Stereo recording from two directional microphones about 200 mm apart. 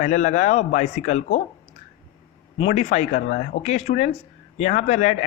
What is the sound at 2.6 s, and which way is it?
Speech, 35° left (ahead or behind).